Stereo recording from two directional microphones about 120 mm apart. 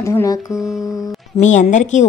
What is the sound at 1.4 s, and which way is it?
Speech, 90° left.